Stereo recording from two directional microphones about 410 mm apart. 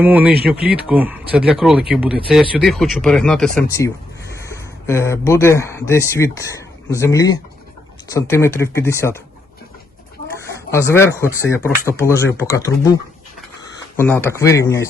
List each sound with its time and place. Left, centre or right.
0.0 s speech: centre
0.5 s speech: right
0.9 s speech: centre
10.7 s speech: centre
13.9 s speech: centre